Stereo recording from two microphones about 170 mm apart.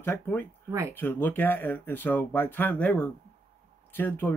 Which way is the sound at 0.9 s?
10° left (ahead or behind).